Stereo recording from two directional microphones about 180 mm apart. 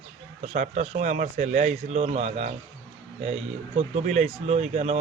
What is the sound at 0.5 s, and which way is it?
Speech, 40° right (ahead or behind).